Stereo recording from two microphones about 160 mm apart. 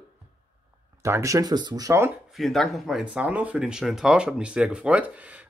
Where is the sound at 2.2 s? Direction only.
Centre (ahead or behind).